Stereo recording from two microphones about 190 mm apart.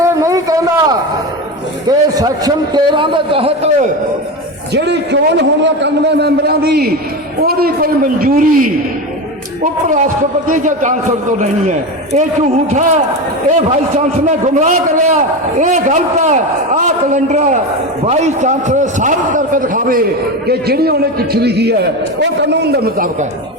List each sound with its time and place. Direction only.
0.0 s a sound: 15° right (ahead or behind)
1.9 s a man's voice: 20° right (ahead or behind)
4.7 s a man's voice: 65° right (ahead or behind)
10.5 s a man's voice: 45° right (ahead or behind)
12.7 s a man's voice: 35° right (ahead or behind); by 23.0 s 55° right (ahead or behind)